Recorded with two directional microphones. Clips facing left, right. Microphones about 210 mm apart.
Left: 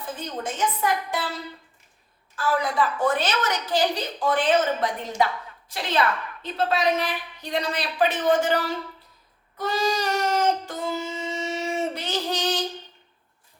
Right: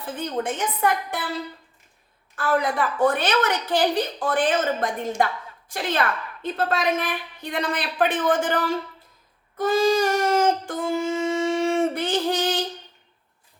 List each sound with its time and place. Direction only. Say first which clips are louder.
0.2 s a woman's voice: right 3 dB; 60° right (ahead or behind)
2.3 s a woman's voice: right 2 dB; 60° right (ahead or behind)
9.6 s a sound: right 6 dB; 50° right (ahead or behind)